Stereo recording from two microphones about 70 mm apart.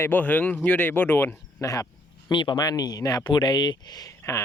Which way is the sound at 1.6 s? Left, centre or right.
Left.